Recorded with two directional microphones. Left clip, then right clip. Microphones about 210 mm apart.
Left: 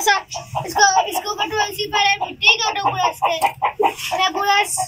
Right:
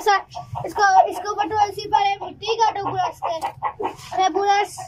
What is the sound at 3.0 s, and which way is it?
Speech, 20° left (ahead or behind).